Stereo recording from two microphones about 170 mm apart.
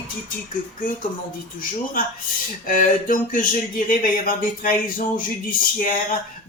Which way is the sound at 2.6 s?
55° left (ahead or behind).